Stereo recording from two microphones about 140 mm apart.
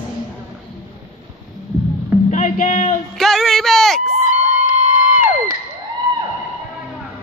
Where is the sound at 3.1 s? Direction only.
Centre (ahead or behind).